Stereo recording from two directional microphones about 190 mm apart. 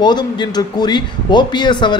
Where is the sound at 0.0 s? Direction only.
25° left (ahead or behind).